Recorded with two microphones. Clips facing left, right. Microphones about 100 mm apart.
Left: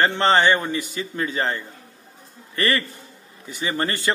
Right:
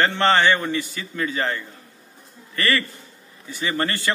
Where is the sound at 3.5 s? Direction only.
20° left (ahead or behind).